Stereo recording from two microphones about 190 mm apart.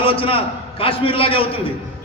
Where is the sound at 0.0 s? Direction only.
30° left (ahead or behind).